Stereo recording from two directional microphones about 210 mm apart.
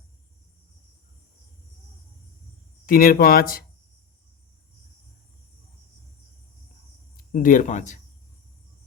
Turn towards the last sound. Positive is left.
turn(degrees=35)  # may be behind; listen again after turning